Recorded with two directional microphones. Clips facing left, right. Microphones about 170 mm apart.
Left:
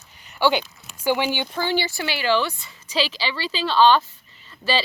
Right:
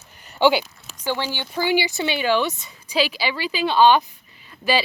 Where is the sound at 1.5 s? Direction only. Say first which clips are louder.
Right 3 dB; 10° right (ahead or behind).